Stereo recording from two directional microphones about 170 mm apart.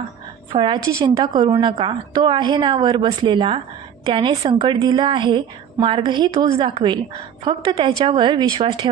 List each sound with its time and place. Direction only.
0.5 s a woman's voice: 30° right (ahead or behind)